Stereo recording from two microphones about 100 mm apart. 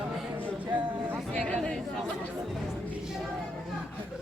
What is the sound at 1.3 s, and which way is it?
Chatter, 10° left (ahead or behind).